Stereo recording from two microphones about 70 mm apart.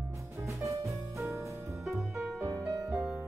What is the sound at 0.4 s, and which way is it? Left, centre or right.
Music, right.